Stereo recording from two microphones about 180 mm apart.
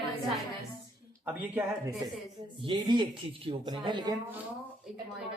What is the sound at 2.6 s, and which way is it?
Speech, 25° right (ahead or behind).